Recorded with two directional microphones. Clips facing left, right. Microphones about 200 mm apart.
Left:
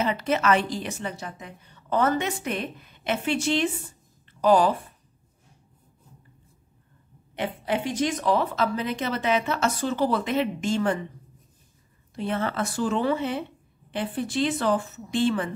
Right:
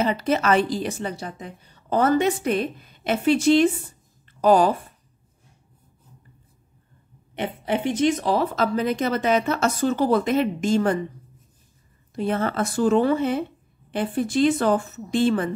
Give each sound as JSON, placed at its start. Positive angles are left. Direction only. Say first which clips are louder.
{"t": 0.0, "sound": "a woman's voice", "louder": "right 3 dB", "side_deg": -35}
{"t": 7.3, "sound": "a woman's voice", "louder": "right 2 dB", "side_deg": -25}
{"t": 12.2, "sound": "a woman's voice", "louder": "right 4 dB", "side_deg": -45}